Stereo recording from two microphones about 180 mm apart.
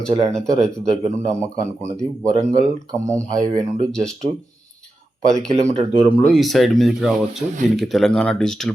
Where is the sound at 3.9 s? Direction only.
5° left (ahead or behind).